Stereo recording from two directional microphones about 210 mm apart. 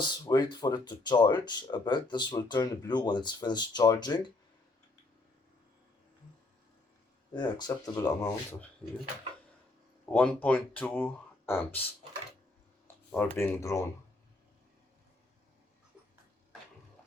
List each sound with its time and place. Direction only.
0.1 s speech: 20° left (ahead or behind)
7.3 s speech: 20° left (ahead or behind)
10.1 s speech: 5° left (ahead or behind)
13.1 s speech: 5° left (ahead or behind)